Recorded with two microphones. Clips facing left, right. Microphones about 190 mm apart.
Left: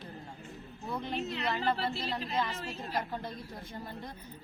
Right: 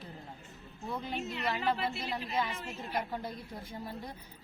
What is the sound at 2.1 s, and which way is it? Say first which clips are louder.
A woman's voice: left 1 dB; centre (ahead or behind).